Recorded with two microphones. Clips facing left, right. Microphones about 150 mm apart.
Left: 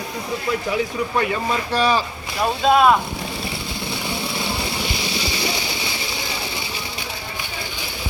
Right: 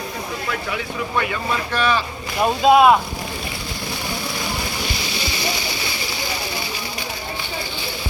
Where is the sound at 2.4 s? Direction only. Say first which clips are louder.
Right 2 dB; 5° right (ahead or behind).